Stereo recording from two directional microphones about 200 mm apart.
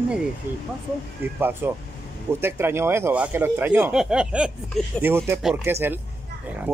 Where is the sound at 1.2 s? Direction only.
10° right (ahead or behind).